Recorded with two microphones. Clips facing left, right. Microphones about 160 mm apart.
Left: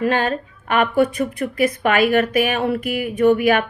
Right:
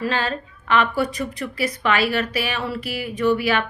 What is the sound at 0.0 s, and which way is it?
Speech, 50° left (ahead or behind).